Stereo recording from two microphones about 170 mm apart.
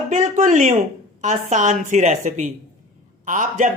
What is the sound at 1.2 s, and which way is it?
Speech, 45° right (ahead or behind).